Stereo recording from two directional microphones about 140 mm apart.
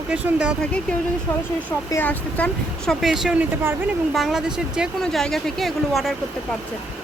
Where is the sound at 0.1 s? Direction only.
5° right (ahead or behind).